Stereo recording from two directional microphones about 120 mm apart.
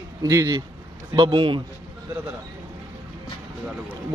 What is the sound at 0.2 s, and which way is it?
Speech, 30° right (ahead or behind).